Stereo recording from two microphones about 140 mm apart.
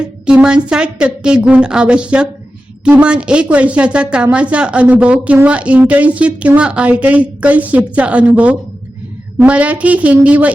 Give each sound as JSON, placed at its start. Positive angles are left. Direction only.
{"t": 0.0, "sound": "a woman's voice", "side_deg": -5}